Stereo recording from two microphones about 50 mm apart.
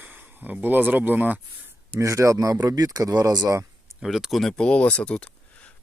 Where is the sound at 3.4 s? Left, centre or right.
Right.